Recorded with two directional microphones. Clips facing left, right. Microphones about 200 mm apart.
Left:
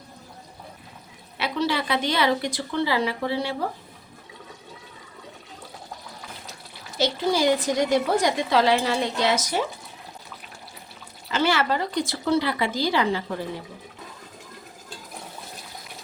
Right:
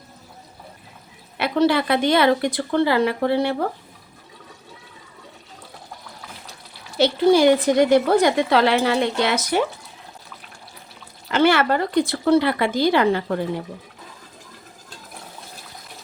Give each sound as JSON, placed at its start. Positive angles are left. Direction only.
{"t": 1.4, "sound": "a woman's voice", "side_deg": -55}
{"t": 7.0, "sound": "a woman's voice", "side_deg": -60}
{"t": 11.3, "sound": "a woman's voice", "side_deg": -60}